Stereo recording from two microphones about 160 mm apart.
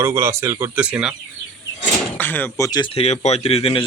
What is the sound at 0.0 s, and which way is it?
Speech, 15° right (ahead or behind).